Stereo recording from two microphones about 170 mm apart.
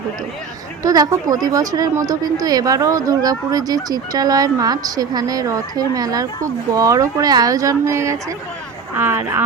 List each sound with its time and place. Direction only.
0.8 s speech: 20° right (ahead or behind)